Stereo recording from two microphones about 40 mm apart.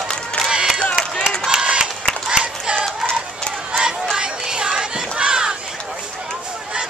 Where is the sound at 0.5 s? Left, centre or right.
Centre.